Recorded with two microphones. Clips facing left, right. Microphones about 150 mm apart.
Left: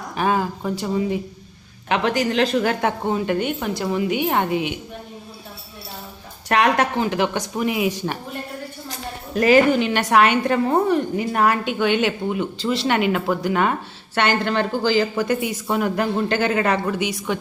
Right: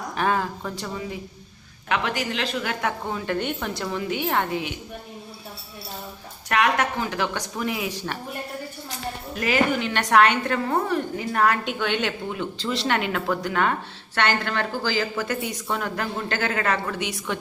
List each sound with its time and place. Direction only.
0.2 s speech: 5° left (ahead or behind)
0.9 s speech: 25° left (ahead or behind)
1.9 s speech: 40° left (ahead or behind)
2.8 s speech: 25° left (ahead or behind)
3.3 s a woman's voice: 10° left (ahead or behind)
6.5 s speech: 30° left (ahead or behind)
7.1 s speech: 20° left (ahead or behind)
9.3 s speech: 40° left (ahead or behind)
9.9 s a woman's voice: 5° left (ahead or behind)
17.0 s a woman's voice: centre (ahead or behind)